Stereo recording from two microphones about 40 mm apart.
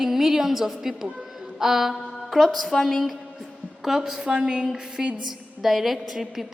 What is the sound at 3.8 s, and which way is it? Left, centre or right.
A woman's voice, centre.